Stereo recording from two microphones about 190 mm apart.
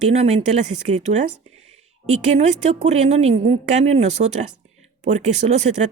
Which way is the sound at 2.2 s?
35° right (ahead or behind).